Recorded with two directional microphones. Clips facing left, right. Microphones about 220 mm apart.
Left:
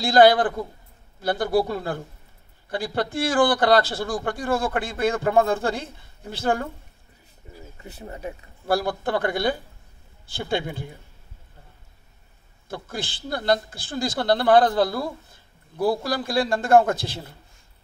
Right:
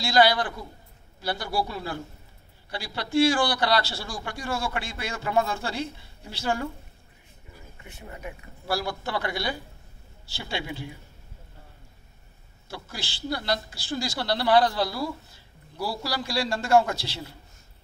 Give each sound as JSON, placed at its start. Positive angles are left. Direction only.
{"t": 0.0, "sound": "speech", "side_deg": 50}
{"t": 7.8, "sound": "speech", "side_deg": 35}
{"t": 8.6, "sound": "speech", "side_deg": 50}
{"t": 12.6, "sound": "speech", "side_deg": 50}